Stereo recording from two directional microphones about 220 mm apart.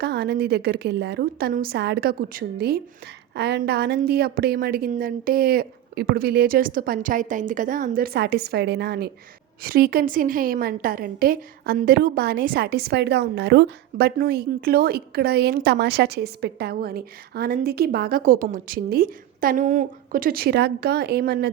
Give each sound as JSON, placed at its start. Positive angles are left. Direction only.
{"t": 0.0, "sound": "a woman's voice", "side_deg": -50}